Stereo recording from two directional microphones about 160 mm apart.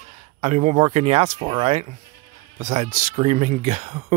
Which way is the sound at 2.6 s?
50° right (ahead or behind).